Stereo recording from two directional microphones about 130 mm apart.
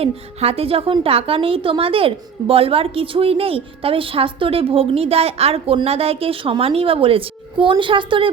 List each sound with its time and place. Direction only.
0.0 s a woman's voice: 50° right (ahead or behind)